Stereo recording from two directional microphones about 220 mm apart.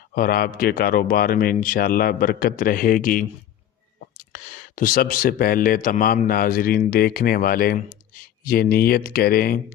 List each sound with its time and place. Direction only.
0.1 s speech: 40° left (ahead or behind)